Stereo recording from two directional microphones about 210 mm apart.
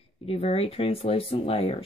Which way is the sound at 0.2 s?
30° left (ahead or behind).